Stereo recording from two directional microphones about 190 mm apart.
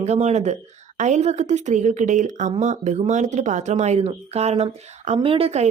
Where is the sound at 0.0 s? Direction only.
35° right (ahead or behind).